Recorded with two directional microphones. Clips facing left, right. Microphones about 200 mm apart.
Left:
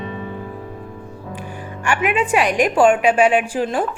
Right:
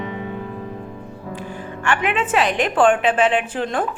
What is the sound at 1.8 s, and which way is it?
A woman's voice, 10° left (ahead or behind).